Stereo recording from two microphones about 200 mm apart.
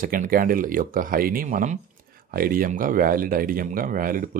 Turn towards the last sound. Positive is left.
turn(degrees=-45)  # may be behind; listen again after turning